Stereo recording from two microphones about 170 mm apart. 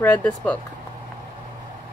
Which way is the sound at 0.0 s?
10° left (ahead or behind).